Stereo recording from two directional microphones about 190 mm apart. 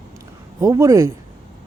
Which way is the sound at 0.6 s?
15° right (ahead or behind).